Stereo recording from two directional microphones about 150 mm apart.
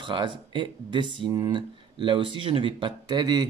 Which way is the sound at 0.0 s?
30° right (ahead or behind).